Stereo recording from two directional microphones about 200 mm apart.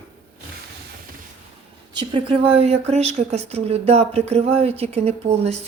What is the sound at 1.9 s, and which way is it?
Speech, 25° right (ahead or behind).